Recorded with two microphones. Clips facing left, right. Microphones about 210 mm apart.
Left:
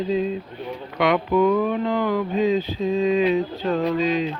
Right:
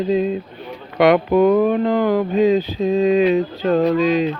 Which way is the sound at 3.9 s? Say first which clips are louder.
Right 5 dB; 75° right (ahead or behind).